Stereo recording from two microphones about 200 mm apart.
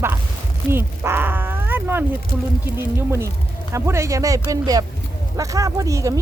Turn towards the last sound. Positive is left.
turn(degrees=-15)  # may be behind; listen again after turning